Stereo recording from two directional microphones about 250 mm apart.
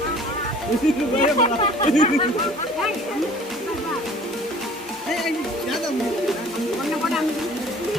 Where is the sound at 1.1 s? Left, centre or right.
Left.